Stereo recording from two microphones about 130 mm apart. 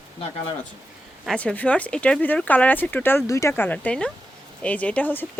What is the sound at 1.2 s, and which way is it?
Speech, 10° left (ahead or behind).